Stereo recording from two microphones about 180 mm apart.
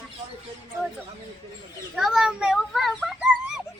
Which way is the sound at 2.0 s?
Centre (ahead or behind).